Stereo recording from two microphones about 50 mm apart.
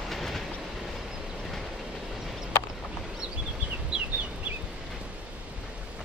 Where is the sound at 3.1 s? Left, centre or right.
Centre.